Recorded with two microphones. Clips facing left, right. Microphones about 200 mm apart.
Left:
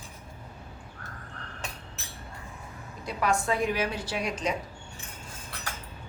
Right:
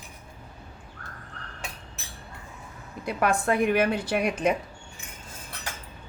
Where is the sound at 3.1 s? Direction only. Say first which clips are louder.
Right 3 dB; 55° right (ahead or behind).